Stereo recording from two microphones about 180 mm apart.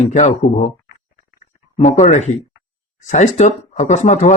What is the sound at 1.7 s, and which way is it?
Speech, 40° left (ahead or behind).